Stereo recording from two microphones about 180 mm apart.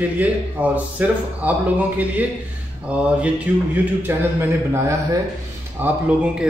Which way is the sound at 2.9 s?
5° right (ahead or behind).